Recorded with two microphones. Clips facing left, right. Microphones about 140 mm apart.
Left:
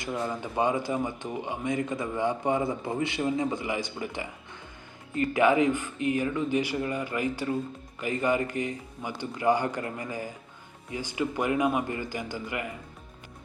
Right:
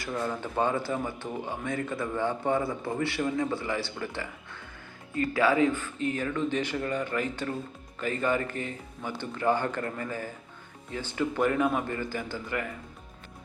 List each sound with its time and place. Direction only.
0.0 s speech: 15° left (ahead or behind)